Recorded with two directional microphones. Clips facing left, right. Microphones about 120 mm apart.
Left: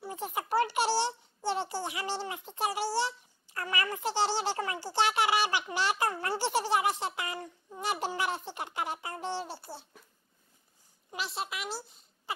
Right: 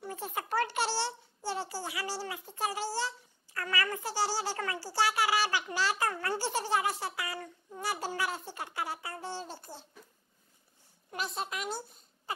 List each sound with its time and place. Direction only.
0.1 s a child's voice: 15° left (ahead or behind)
11.4 s a woman's voice: 5° left (ahead or behind)